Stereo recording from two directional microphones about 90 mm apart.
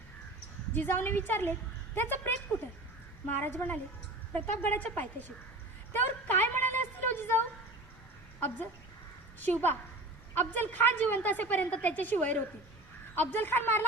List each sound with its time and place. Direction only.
0.7 s a woman's voice: 25° left (ahead or behind)
5.9 s a sound: 20° left (ahead or behind)
9.4 s a woman's voice: 20° left (ahead or behind)